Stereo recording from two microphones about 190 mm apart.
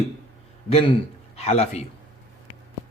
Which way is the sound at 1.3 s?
35° left (ahead or behind).